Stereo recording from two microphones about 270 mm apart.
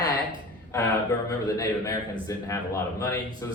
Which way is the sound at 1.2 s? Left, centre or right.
Centre.